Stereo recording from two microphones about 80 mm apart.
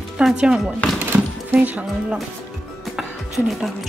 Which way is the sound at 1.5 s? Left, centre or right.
Right.